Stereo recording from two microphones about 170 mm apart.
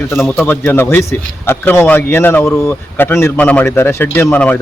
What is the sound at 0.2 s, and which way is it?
Speech, 10° left (ahead or behind).